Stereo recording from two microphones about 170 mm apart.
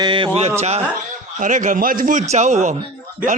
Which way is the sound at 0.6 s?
40° right (ahead or behind).